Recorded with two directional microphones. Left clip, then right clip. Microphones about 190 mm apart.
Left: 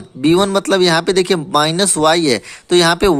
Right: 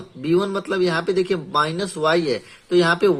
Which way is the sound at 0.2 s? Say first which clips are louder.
Left 8 dB; 50° left (ahead or behind).